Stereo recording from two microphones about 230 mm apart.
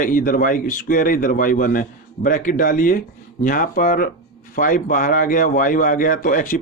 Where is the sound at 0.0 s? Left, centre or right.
Left.